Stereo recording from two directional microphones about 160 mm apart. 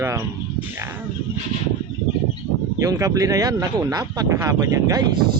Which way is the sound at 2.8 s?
20° right (ahead or behind).